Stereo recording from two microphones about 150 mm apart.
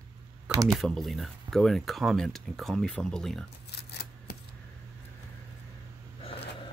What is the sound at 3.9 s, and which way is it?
Scissors, 90° left.